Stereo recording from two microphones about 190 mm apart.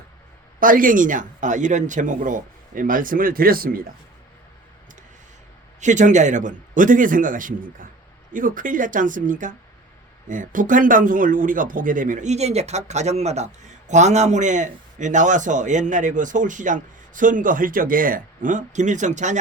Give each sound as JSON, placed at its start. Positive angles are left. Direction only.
{"t": 0.6, "sound": "speech", "side_deg": -45}
{"t": 5.8, "sound": "speech", "side_deg": -40}